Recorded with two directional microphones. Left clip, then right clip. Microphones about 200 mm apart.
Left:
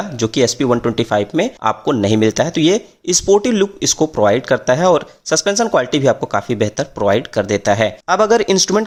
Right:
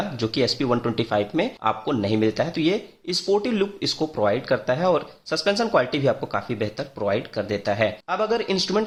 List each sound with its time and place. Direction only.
0.2 s speech: 30° left (ahead or behind)